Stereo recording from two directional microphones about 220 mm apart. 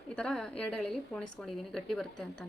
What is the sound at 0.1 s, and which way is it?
A woman's voice, 5° left (ahead or behind).